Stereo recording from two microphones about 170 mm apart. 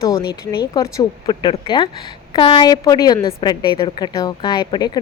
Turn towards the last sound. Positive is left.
turn(degrees=25)  # may be behind; listen again after turning